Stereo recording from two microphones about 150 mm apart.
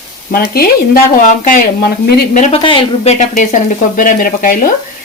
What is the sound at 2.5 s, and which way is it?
Speech, 35° left (ahead or behind).